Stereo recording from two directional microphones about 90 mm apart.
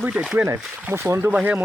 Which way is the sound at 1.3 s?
15° right (ahead or behind).